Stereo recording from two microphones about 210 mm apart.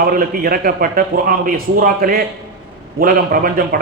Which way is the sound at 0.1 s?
45° right (ahead or behind).